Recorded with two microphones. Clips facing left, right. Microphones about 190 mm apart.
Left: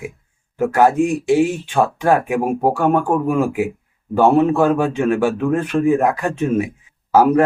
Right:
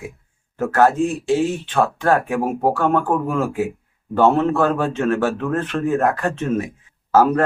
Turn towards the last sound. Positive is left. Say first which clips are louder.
# left 2 dB
turn(degrees=15)  # may be behind; listen again after turning